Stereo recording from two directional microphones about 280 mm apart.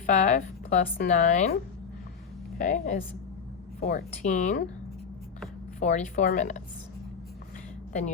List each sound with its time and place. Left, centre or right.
0.0 s speech: left
2.6 s speech: left
5.8 s speech: left